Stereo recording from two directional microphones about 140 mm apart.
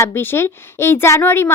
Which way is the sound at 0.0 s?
15° left (ahead or behind).